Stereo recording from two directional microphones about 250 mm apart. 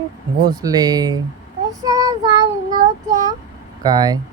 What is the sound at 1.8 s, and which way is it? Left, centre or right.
Child singing, centre.